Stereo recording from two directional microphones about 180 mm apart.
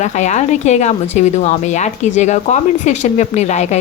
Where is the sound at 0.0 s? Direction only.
40° left (ahead or behind).